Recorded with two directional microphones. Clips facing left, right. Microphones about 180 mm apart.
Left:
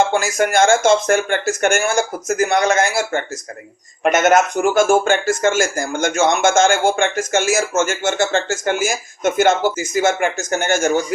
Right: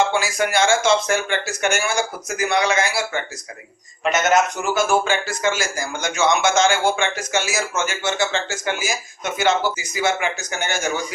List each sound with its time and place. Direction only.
0.1 s speech: 45° left (ahead or behind)